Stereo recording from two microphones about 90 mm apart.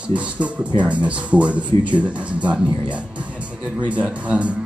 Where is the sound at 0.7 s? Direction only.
15° right (ahead or behind).